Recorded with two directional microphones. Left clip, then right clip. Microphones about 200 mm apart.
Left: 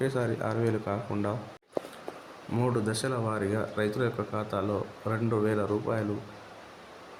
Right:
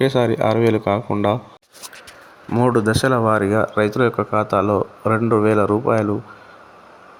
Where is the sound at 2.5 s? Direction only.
35° right (ahead or behind).